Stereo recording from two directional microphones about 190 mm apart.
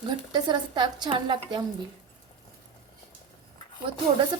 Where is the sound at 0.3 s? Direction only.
25° right (ahead or behind).